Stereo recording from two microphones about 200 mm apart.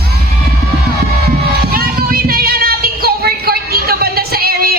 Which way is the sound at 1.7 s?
50° right (ahead or behind).